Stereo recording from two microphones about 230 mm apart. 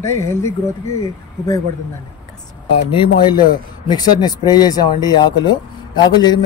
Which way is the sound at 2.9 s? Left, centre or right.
Left.